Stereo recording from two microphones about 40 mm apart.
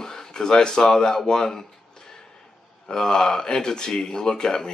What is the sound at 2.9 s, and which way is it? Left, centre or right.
Speech, centre.